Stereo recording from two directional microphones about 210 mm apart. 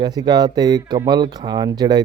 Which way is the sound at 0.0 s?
20° right (ahead or behind).